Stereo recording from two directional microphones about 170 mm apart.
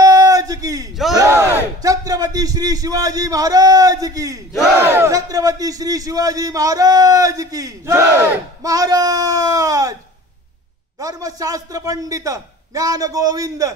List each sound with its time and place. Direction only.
0.0 s a sound: 20° right (ahead or behind)
1.1 s battle cry: 15° right (ahead or behind)
1.8 s a man's voice: 20° right (ahead or behind)
11.0 s a man's voice: 20° right (ahead or behind)